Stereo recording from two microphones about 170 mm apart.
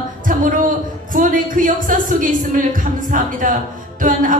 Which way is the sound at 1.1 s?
50° right (ahead or behind).